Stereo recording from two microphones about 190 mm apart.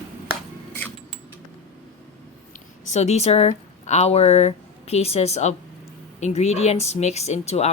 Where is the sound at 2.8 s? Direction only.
35° left (ahead or behind).